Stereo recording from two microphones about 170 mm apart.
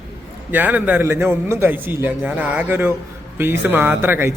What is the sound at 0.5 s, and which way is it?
Speech, 10° right (ahead or behind).